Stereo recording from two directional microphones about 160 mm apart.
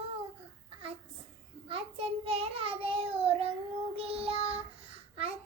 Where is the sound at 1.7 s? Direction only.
35° right (ahead or behind).